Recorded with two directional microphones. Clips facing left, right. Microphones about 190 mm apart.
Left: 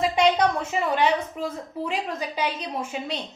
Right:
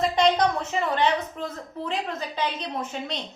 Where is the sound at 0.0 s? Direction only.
10° left (ahead or behind).